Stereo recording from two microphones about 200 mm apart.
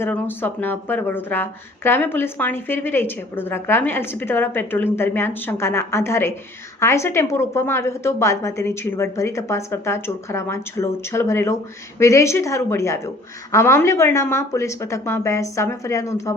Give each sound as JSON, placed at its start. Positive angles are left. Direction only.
{"t": 0.0, "sound": "a woman's voice", "side_deg": 10}